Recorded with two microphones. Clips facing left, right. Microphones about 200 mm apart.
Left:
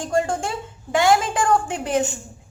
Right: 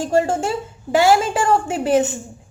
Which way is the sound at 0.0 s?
5° right (ahead or behind).